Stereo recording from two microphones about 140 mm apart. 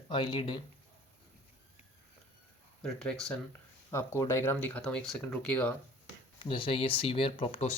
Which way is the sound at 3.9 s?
20° left (ahead or behind).